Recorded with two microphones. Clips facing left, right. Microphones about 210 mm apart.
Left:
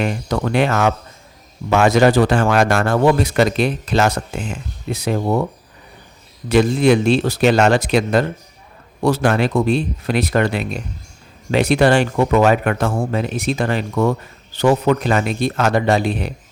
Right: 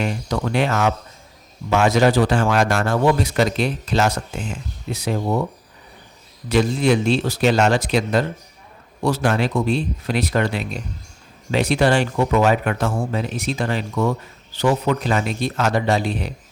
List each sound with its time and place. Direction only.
0.0 s speech: 60° left (ahead or behind)
6.5 s speech: 55° left (ahead or behind)